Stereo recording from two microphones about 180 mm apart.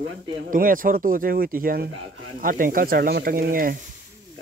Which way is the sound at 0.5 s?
50° right (ahead or behind).